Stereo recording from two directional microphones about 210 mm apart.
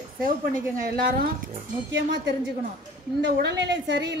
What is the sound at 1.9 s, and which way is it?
A woman's voice, 60° right (ahead or behind).